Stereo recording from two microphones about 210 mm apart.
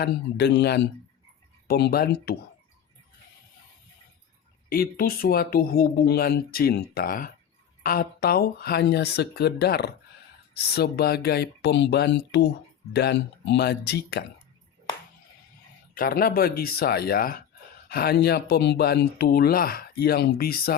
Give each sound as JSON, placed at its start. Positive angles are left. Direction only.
{"t": 0.0, "sound": "speech", "side_deg": 50}
{"t": 4.7, "sound": "speech", "side_deg": 45}
{"t": 16.0, "sound": "speech", "side_deg": 45}